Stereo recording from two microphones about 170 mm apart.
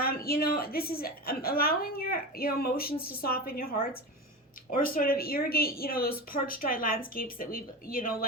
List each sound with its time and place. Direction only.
0.0 s a woman's voice: 60° left (ahead or behind)